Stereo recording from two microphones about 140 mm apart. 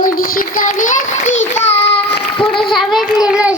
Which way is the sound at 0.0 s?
85° left.